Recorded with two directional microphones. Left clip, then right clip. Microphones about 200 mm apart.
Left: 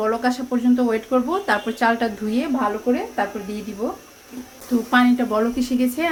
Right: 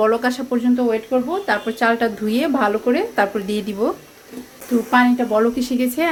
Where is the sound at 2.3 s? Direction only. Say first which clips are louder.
Right 6 dB; 25° right (ahead or behind).